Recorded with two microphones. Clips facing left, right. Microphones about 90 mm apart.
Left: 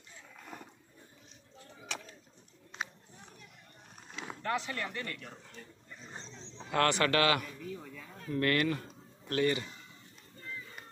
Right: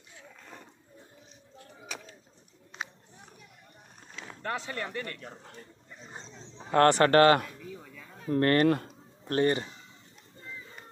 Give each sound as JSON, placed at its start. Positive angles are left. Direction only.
{"t": 1.8, "sound": "bird", "side_deg": -5}
{"t": 4.1, "sound": "vehicle", "side_deg": 5}
{"t": 4.7, "sound": "speech", "side_deg": -25}
{"t": 6.0, "sound": "dog", "side_deg": -10}
{"t": 6.6, "sound": "speech", "side_deg": -40}
{"t": 7.5, "sound": "a sound", "side_deg": -5}
{"t": 8.3, "sound": "speech", "side_deg": -40}
{"t": 8.6, "sound": "speech", "side_deg": -55}
{"t": 9.2, "sound": "speech", "side_deg": -40}